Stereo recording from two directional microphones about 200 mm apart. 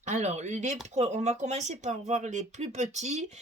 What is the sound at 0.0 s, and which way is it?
Speech, 35° right (ahead or behind).